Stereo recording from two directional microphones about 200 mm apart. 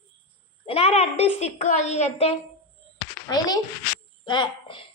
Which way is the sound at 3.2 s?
20° left (ahead or behind).